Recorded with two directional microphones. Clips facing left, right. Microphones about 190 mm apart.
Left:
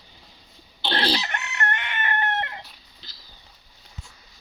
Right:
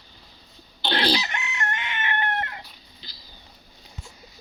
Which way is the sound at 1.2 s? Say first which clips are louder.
Left 2 dB; 60° left (ahead or behind).